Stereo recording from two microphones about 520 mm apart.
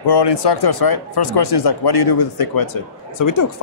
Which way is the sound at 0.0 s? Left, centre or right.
Left.